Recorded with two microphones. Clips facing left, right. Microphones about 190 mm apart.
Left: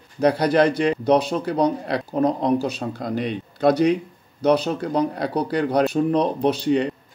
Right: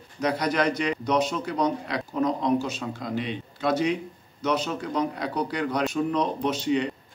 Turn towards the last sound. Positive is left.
turn(degrees=35)  # may be behind; listen again after turning